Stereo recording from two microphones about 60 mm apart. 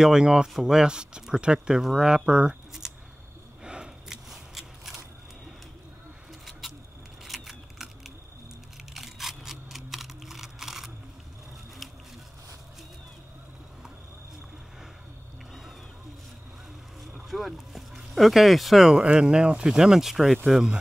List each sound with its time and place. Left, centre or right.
0.0 s speech: centre
3.6 s a sound: centre
4.3 s scissors: centre
7.2 s a sound: centre
8.9 s camera: centre
17.3 s speech: centre